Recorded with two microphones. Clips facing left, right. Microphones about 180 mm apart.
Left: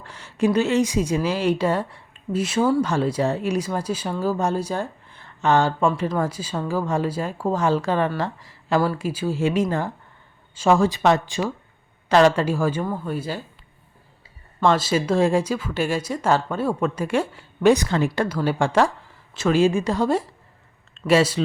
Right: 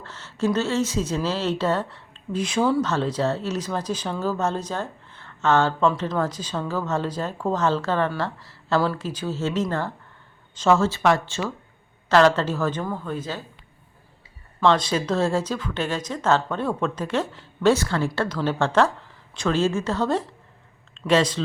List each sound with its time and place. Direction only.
0.0 s a woman's voice: 15° left (ahead or behind)
14.6 s speech: 5° left (ahead or behind)